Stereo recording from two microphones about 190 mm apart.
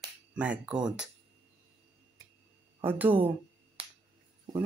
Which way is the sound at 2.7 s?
10° right (ahead or behind).